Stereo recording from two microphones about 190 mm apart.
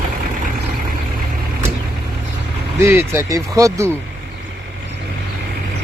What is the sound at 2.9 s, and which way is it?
Speech, 10° right (ahead or behind).